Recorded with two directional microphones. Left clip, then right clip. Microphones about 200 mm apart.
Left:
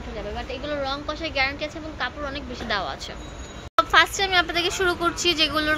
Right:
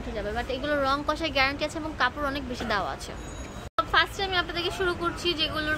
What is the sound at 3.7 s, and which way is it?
Speech, 25° left (ahead or behind).